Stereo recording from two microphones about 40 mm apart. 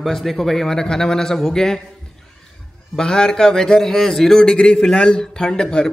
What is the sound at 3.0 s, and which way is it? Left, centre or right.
Speech, centre.